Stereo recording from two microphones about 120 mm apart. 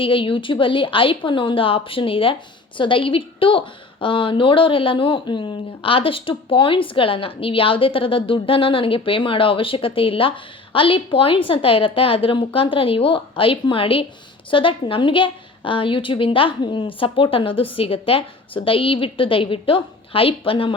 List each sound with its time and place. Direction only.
0.0 s speech: 45° left (ahead or behind)